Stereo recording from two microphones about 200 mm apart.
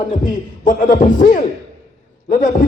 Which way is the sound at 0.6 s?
40° left (ahead or behind).